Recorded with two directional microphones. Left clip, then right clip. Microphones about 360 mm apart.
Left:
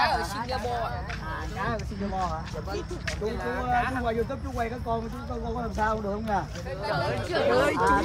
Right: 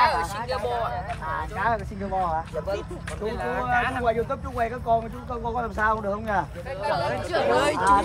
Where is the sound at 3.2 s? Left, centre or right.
Right.